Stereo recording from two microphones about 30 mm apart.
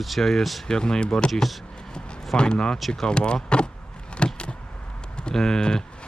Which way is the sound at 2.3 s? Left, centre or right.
Left.